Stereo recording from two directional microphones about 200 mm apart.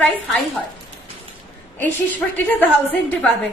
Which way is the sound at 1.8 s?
10° left (ahead or behind).